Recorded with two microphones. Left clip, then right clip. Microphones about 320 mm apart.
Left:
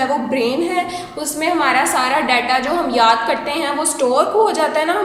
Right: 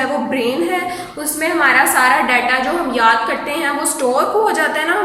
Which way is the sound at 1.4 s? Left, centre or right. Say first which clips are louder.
Right 3 dB; centre.